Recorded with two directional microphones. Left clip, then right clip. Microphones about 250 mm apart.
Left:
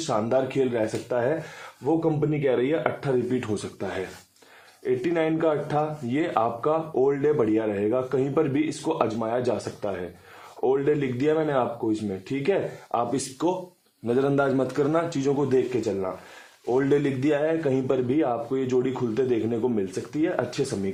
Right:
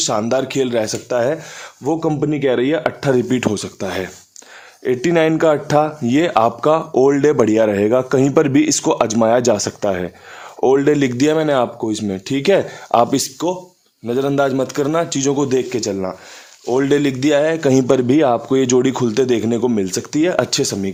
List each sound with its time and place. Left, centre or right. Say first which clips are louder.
0.1 s a man's voice: right 6 dB; right
13.4 s a man's voice: right 5 dB; right